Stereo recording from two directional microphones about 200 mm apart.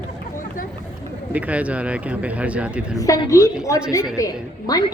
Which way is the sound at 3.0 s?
15° left (ahead or behind).